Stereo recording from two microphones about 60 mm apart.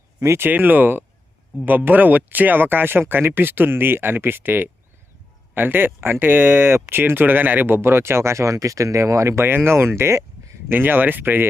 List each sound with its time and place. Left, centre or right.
0.2 s speech: right
7.8 s speech: right
9.4 s speech: right
10.7 s speech: right